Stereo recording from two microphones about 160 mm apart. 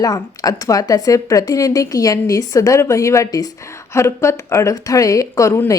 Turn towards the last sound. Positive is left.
turn(degrees=20)  # may be behind; listen again after turning